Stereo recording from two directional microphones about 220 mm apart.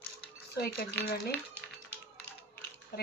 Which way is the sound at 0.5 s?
45° left (ahead or behind).